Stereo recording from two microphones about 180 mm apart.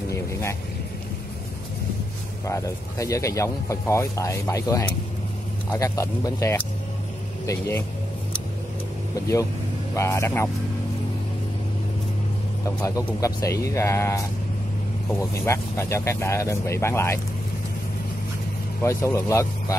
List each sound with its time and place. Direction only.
0.1 s vehicle: 15° left (ahead or behind)
2.4 s speech: 15° left (ahead or behind)
9.9 s speech: 15° left (ahead or behind)
12.6 s speech: 20° left (ahead or behind)
18.8 s speech: 15° left (ahead or behind)